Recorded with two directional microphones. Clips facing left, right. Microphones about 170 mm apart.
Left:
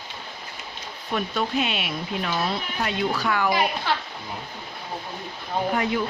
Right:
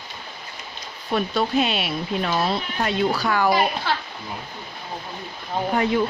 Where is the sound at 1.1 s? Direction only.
35° right (ahead or behind).